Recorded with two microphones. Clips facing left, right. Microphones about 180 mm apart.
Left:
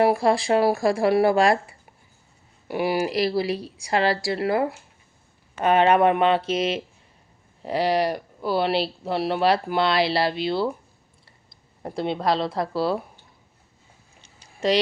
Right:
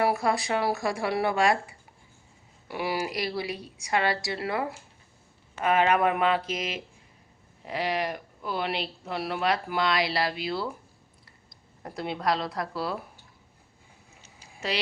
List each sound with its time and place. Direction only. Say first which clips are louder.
0.0 s speech: left 6 dB; 30° left (ahead or behind)
2.6 s speech: left 7 dB; 25° left (ahead or behind)